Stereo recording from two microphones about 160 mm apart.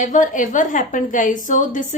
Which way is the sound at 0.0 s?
55° left (ahead or behind).